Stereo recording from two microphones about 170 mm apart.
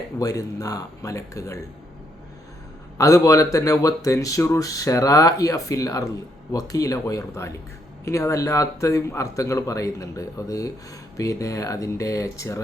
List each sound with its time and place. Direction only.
0.2 s speech: 20° left (ahead or behind)
3.0 s speech: 20° left (ahead or behind)